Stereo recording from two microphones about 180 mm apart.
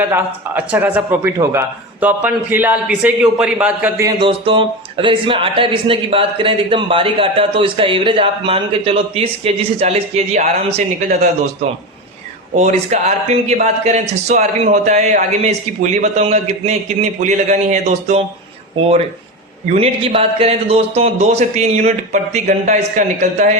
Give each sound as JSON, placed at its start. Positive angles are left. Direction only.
{"t": 0.1, "sound": "a man's voice", "side_deg": -10}
{"t": 4.2, "sound": "speech", "side_deg": -30}
{"t": 12.5, "sound": "speech", "side_deg": -40}
{"t": 19.6, "sound": "speech", "side_deg": -35}